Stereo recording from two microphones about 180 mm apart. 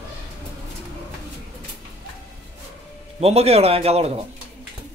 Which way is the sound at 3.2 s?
35° right (ahead or behind).